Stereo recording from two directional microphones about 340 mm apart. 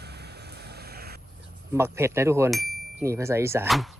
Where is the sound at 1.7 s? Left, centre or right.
Centre.